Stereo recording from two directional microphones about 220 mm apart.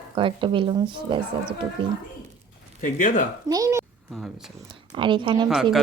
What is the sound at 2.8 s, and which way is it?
Speech, 40° left (ahead or behind).